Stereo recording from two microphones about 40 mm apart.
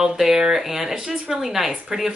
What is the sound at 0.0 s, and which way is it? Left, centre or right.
Speech, centre.